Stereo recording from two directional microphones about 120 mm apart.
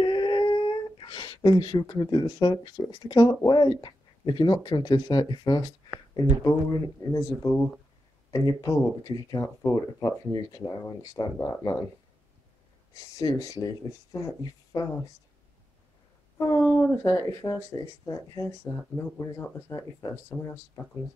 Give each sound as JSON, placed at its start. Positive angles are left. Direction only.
{"t": 0.0, "sound": "speech", "side_deg": 40}
{"t": 8.3, "sound": "speech", "side_deg": 30}
{"t": 12.9, "sound": "speech", "side_deg": 30}
{"t": 16.3, "sound": "speech", "side_deg": 20}